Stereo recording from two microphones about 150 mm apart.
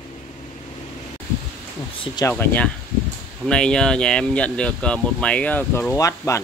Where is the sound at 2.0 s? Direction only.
30° left (ahead or behind).